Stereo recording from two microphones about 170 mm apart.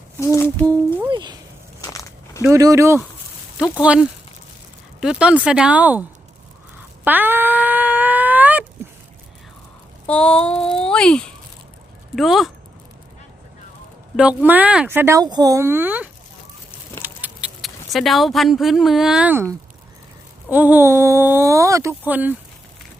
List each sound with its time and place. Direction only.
0.2 s humming: 15° left (ahead or behind)
1.1 s a sound: 25° right (ahead or behind)
1.9 s biting: 20° left (ahead or behind)
2.4 s speech: 20° right (ahead or behind)
3.6 s speech: 5° right (ahead or behind)
7.0 s a sound: 10° right (ahead or behind)
10.1 s speech: 5° left (ahead or behind)
14.2 s speech: 10° right (ahead or behind)